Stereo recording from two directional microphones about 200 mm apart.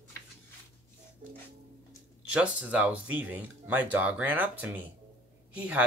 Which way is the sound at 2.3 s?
5° right (ahead or behind).